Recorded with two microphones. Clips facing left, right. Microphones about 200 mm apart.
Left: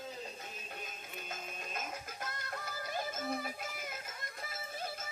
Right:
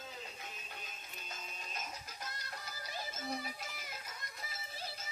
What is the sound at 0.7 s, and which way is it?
Music, 50° left (ahead or behind).